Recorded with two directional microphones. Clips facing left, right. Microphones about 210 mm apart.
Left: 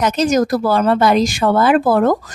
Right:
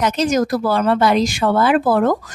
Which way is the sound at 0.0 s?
45° left (ahead or behind).